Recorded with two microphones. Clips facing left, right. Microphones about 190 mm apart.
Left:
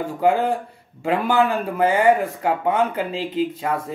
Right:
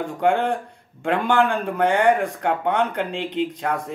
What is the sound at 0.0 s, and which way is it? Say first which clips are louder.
Speech: left 1 dB; 5° left (ahead or behind).